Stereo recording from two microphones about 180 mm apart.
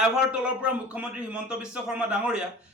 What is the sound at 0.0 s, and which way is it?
A man's voice, 5° right (ahead or behind).